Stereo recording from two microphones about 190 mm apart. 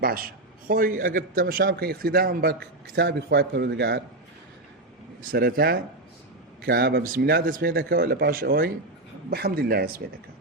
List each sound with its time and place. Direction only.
0.0 s a man's voice: 50° right (ahead or behind)
5.3 s a man's voice: 50° right (ahead or behind)